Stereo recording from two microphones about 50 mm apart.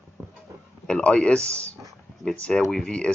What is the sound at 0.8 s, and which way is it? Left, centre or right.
Speech, centre.